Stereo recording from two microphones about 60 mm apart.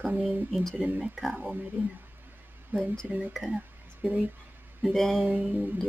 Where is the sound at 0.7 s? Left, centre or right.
Right.